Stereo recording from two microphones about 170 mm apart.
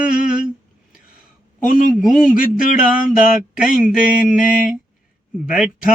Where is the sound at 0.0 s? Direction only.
50° left (ahead or behind).